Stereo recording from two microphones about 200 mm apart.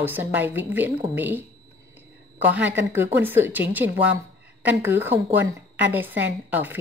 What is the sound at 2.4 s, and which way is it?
A woman's voice, 10° right (ahead or behind).